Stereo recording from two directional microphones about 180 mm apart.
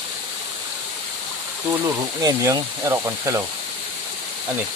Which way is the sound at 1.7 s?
20° right (ahead or behind).